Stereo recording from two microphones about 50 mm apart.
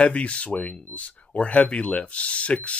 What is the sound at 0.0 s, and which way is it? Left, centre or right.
Speech, left.